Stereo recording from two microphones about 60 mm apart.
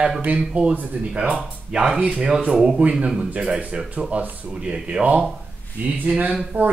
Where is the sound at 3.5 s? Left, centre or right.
Right.